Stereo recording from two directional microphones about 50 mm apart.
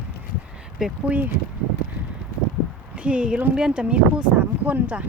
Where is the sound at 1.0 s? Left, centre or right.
Right.